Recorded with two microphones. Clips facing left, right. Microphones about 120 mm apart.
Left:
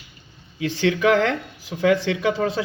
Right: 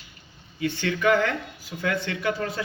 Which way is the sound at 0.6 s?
90° left.